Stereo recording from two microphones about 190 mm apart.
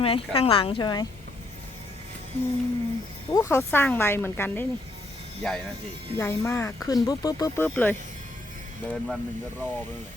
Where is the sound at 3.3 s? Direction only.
15° left (ahead or behind).